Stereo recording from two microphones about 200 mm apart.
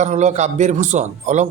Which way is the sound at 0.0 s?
35° right (ahead or behind).